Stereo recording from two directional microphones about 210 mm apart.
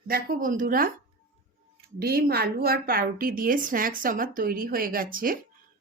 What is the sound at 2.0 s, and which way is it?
A woman's voice, 45° right (ahead or behind).